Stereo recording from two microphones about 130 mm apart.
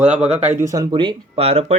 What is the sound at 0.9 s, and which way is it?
Speech, 40° right (ahead or behind).